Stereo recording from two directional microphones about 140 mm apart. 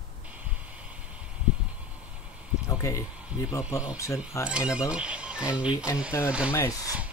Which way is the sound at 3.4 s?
25° left (ahead or behind).